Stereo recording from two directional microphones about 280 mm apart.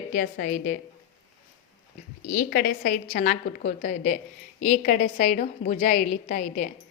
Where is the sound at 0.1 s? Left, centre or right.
Left.